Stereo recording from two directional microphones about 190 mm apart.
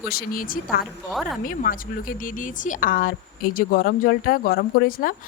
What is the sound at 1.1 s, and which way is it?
Speech, centre (ahead or behind).